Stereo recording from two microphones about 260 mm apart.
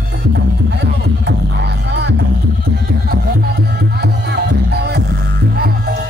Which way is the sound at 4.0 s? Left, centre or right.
Right.